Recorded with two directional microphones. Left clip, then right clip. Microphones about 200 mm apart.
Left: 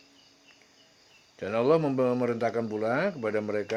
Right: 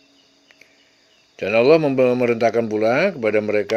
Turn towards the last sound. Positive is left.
turn(degrees=-40)  # may be behind; listen again after turning